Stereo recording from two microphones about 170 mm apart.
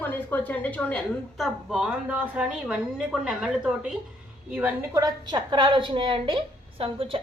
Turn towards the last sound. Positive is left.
turn(degrees=-30)  # may be behind; listen again after turning